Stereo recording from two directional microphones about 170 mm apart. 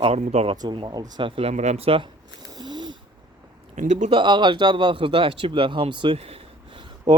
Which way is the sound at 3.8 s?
45° right (ahead or behind).